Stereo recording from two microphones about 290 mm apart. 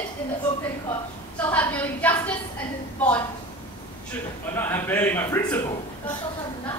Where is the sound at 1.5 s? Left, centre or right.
Centre.